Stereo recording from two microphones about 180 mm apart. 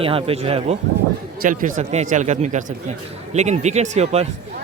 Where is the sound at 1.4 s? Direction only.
45° right (ahead or behind).